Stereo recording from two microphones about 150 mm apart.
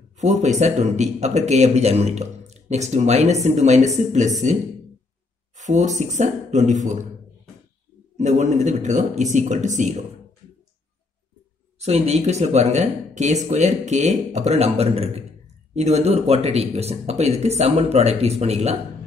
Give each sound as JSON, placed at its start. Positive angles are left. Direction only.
{"t": 0.2, "sound": "speech", "side_deg": -50}
{"t": 5.6, "sound": "speech", "side_deg": -50}
{"t": 8.2, "sound": "speech", "side_deg": -50}
{"t": 11.8, "sound": "speech", "side_deg": -50}